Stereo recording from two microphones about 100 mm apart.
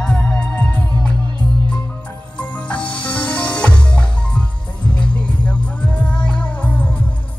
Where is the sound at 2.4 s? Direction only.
10° left (ahead or behind).